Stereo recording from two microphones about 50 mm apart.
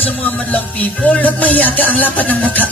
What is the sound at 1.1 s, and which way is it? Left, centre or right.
Music, left.